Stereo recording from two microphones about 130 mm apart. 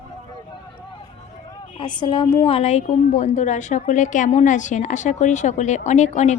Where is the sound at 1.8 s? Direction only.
35° left (ahead or behind).